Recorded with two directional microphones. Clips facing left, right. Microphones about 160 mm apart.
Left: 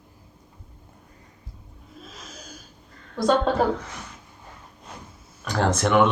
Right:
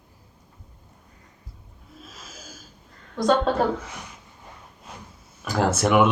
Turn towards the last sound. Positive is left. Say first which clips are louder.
# even
turn(degrees=-5)  # may be behind; listen again after turning